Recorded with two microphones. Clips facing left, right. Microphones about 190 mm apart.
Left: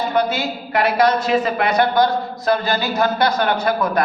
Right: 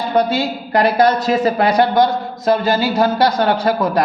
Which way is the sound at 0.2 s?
30° right (ahead or behind).